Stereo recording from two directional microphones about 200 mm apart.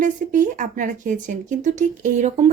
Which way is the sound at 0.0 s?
40° right (ahead or behind).